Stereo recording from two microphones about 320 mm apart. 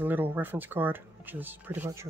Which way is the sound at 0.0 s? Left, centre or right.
Centre.